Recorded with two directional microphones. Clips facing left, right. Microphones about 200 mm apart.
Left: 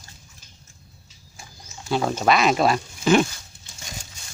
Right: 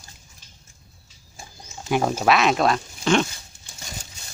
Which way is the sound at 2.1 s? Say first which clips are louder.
Left 1 dB; 5° right (ahead or behind).